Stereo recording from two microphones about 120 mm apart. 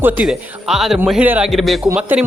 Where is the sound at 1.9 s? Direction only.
10° right (ahead or behind).